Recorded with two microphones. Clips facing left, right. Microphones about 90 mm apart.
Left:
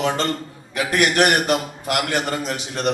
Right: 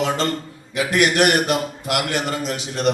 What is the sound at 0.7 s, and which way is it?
A man's voice, 45° left (ahead or behind).